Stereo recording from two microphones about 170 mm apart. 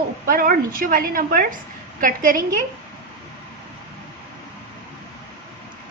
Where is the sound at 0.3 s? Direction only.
55° right (ahead or behind).